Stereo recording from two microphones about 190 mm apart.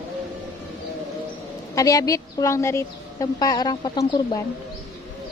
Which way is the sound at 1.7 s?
20° left (ahead or behind).